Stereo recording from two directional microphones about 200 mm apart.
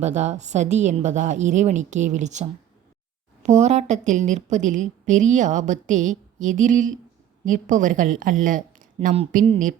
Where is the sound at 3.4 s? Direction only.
35° right (ahead or behind).